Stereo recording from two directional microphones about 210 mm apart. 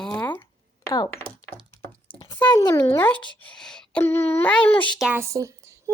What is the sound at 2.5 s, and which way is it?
Speech, 20° left (ahead or behind).